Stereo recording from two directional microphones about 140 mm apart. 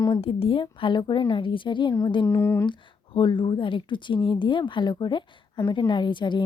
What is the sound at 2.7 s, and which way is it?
Speech, 35° left (ahead or behind).